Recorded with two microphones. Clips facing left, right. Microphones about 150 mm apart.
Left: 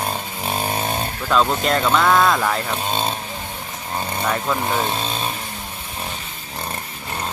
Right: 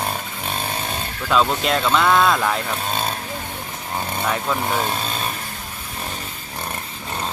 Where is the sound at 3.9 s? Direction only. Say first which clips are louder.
Left 1 dB; centre (ahead or behind).